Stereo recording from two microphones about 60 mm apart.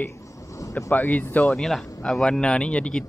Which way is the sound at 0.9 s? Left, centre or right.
Left.